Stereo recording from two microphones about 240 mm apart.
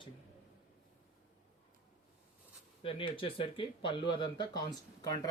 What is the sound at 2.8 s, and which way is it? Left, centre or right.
Speech, left.